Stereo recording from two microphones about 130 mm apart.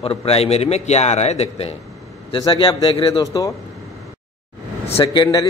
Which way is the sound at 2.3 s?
40° left (ahead or behind).